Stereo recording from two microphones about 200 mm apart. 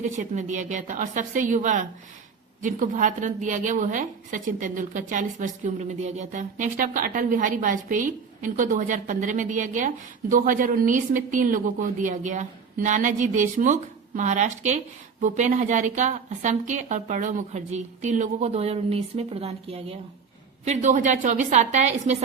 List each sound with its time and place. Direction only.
0.0 s a woman's voice: 40° right (ahead or behind)